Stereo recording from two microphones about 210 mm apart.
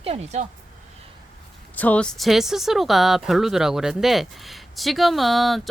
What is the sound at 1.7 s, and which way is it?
Speech, 5° left (ahead or behind).